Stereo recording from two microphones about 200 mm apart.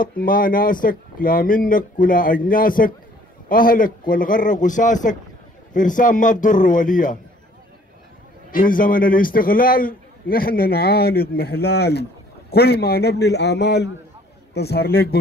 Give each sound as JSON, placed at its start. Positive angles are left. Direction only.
{"t": 0.0, "sound": "a man's voice", "side_deg": 45}
{"t": 8.5, "sound": "a man's voice", "side_deg": 45}